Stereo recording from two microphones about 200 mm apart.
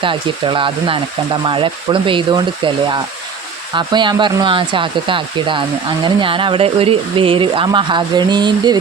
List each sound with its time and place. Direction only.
0.0 s speech: 25° right (ahead or behind)